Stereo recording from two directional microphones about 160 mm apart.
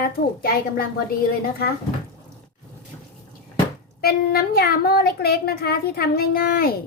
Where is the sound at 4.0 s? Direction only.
75° left (ahead or behind).